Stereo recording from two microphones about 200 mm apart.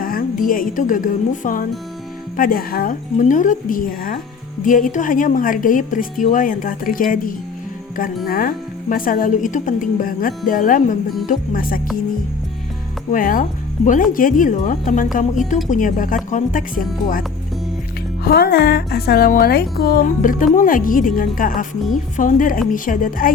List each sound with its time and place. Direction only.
0.0 s a woman's voice: 45° left (ahead or behind)
13.1 s a woman's voice: 45° left (ahead or behind)